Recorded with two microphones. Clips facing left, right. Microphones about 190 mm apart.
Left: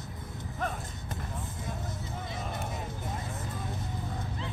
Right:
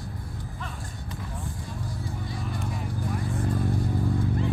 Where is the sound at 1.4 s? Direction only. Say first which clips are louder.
Right 2 dB; 20° left (ahead or behind).